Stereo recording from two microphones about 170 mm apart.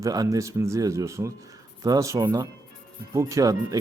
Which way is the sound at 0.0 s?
20° right (ahead or behind).